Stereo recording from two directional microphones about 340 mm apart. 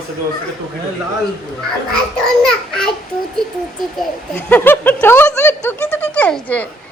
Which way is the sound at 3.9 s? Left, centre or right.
Centre.